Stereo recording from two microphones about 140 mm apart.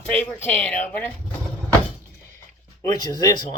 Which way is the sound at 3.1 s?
30° left (ahead or behind).